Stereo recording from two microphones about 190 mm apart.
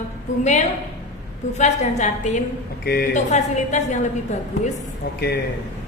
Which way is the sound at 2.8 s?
55° left (ahead or behind).